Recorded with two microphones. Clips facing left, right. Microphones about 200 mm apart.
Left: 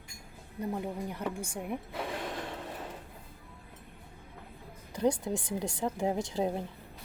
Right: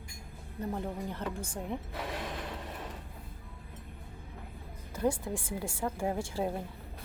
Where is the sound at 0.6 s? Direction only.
10° left (ahead or behind).